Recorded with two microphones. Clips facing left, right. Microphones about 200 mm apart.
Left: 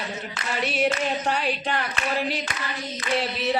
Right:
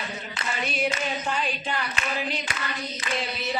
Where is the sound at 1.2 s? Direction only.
65° left (ahead or behind).